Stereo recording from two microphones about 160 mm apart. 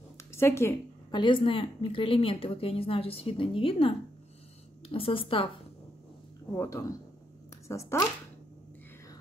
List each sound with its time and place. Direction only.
0.3 s speech: 15° left (ahead or behind)
1.1 s a woman's voice: 30° left (ahead or behind)
6.5 s speech: 15° left (ahead or behind)